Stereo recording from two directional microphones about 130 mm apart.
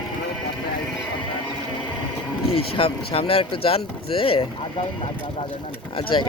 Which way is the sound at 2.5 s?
45° left (ahead or behind).